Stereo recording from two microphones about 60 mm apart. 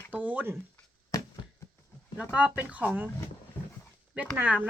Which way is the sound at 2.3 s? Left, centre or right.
Right.